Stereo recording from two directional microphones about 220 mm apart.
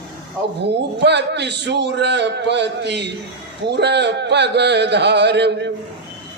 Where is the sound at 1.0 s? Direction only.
50° right (ahead or behind).